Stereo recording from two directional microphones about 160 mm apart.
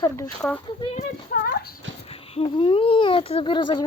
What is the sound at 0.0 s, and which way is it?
Speech, 25° left (ahead or behind).